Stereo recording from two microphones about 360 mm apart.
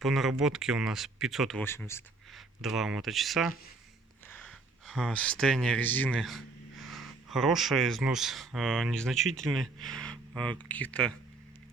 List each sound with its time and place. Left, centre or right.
0.0 s speech: centre